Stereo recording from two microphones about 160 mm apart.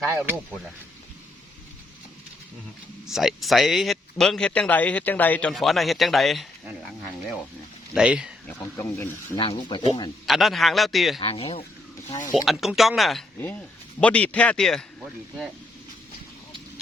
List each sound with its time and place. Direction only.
0.0 s speech: 15° right (ahead or behind)
3.1 s speech: centre (ahead or behind)
7.9 s speech: 5° right (ahead or behind)
8.6 s speech: 20° left (ahead or behind)
9.4 s speech: 30° left (ahead or behind)
10.2 s speech: centre (ahead or behind)
11.2 s speech: 35° left (ahead or behind)
12.5 s a man's voice: centre (ahead or behind)